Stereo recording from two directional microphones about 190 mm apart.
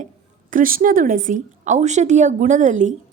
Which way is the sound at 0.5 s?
45° right (ahead or behind).